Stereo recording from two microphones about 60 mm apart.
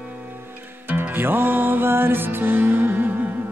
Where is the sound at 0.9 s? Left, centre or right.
Right.